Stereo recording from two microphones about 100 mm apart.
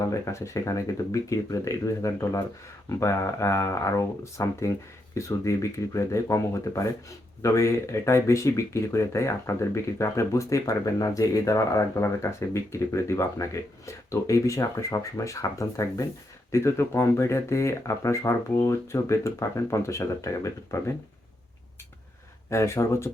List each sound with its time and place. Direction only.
0.0 s speech: 30° left (ahead or behind)
22.4 s speech: 30° left (ahead or behind)